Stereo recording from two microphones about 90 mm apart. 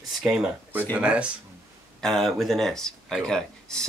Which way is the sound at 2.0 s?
Centre (ahead or behind).